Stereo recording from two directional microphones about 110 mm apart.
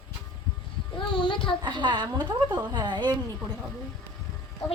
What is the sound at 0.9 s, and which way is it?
Speech, 45° left (ahead or behind).